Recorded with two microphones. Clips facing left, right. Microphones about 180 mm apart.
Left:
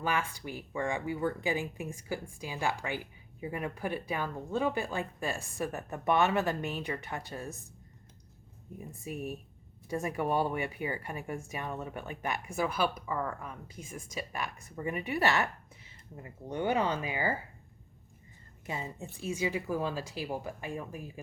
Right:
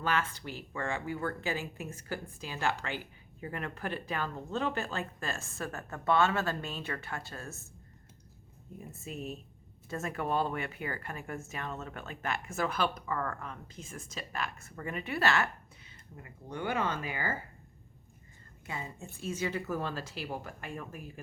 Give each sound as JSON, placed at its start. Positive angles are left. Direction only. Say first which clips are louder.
{"t": 0.0, "sound": "speech", "louder": "even", "side_deg": 10}
{"t": 8.9, "sound": "speech", "louder": "left 2 dB", "side_deg": 15}
{"t": 18.6, "sound": "speech", "louder": "left 3 dB", "side_deg": 20}